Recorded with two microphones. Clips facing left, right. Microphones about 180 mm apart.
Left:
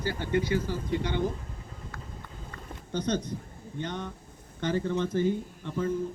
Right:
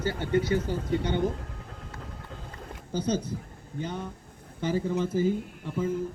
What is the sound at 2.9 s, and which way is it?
Speech, 10° right (ahead or behind).